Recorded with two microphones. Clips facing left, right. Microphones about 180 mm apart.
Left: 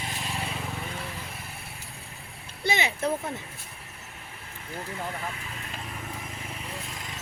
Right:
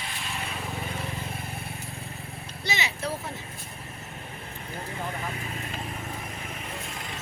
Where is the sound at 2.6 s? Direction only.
55° left (ahead or behind).